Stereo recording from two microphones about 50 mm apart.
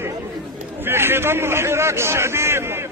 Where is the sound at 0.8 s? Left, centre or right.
Right.